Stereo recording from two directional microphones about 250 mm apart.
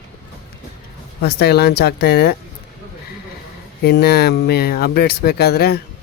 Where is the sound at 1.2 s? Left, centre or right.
Left.